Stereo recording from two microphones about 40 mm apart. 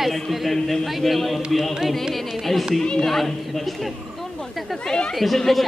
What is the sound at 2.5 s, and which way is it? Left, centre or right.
A man's voice, centre.